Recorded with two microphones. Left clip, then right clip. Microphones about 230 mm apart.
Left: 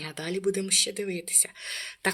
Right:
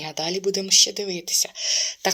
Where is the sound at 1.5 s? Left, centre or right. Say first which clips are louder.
Right 11 dB; centre.